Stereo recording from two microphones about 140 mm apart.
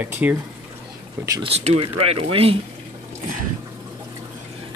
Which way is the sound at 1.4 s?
45° right (ahead or behind).